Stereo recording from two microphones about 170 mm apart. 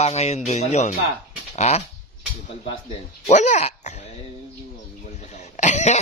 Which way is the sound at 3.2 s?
45° left (ahead or behind).